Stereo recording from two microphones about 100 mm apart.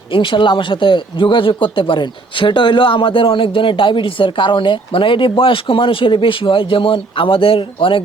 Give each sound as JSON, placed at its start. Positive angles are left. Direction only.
{"t": 0.1, "sound": "speech", "side_deg": 55}